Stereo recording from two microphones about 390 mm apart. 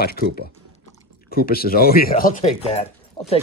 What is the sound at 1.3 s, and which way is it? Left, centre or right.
Speech, left.